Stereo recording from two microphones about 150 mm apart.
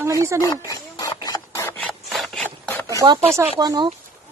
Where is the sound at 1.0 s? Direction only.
25° left (ahead or behind).